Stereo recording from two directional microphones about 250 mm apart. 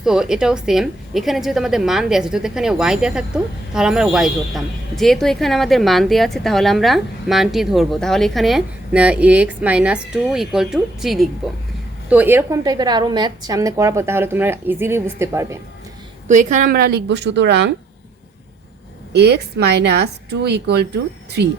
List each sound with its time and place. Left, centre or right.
0.0 s a woman's voice: centre
16.3 s speech: right
19.1 s speech: right